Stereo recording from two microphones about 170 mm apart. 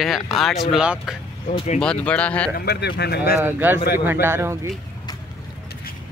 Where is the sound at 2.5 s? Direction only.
70° left (ahead or behind).